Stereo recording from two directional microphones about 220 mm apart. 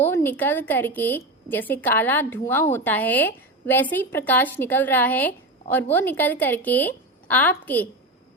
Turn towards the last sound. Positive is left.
turn(degrees=10)  # may be behind; listen again after turning